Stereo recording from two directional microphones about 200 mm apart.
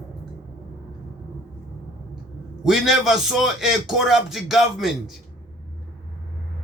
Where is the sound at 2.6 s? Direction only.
Centre (ahead or behind).